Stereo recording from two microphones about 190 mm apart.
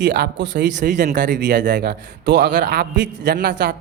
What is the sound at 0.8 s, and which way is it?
A man's voice, 40° right (ahead or behind).